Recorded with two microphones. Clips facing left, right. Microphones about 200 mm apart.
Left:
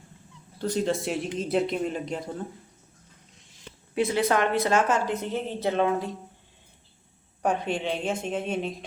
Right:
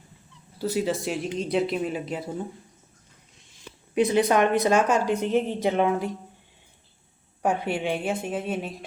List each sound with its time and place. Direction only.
0.6 s speech: 5° right (ahead or behind)
3.9 s a woman's voice: 20° right (ahead or behind)
7.4 s a woman's voice: 10° right (ahead or behind)